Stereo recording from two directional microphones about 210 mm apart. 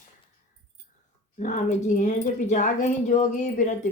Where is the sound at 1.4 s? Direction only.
35° left (ahead or behind).